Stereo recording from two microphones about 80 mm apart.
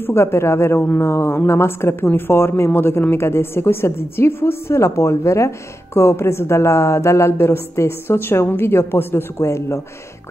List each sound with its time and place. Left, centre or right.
0.0 s speech: left